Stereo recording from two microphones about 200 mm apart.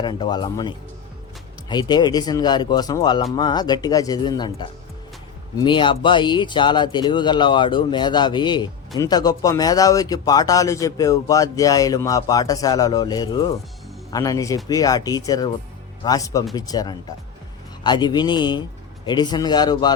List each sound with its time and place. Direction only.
0.0 s speech: 20° left (ahead or behind)
1.7 s speech: 20° left (ahead or behind)